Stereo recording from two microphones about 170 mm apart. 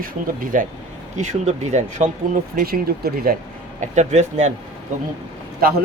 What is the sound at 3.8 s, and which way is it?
Speech, 40° right (ahead or behind).